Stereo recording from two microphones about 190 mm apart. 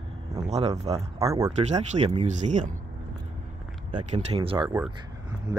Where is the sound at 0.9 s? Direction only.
15° right (ahead or behind).